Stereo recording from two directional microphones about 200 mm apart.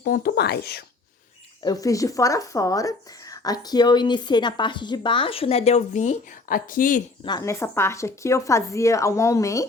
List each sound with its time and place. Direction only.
0.0 s speech: 50° left (ahead or behind)
1.6 s speech: 20° left (ahead or behind); by 7.0 s 40° left (ahead or behind)
7.3 s speech: 15° left (ahead or behind)